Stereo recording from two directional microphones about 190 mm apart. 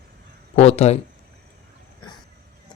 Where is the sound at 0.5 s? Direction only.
35° left (ahead or behind).